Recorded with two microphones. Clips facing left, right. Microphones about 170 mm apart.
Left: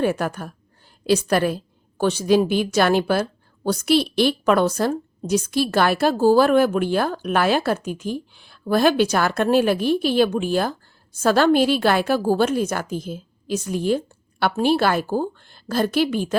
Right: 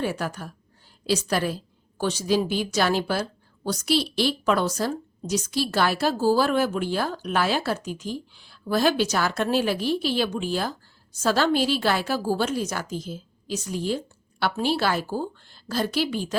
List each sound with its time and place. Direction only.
0.0 s a woman's voice: 55° left (ahead or behind)